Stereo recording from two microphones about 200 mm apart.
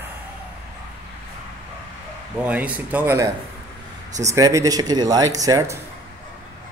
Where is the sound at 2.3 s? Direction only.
5° right (ahead or behind).